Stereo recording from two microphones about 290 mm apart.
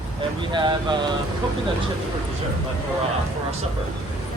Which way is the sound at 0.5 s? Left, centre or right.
Centre.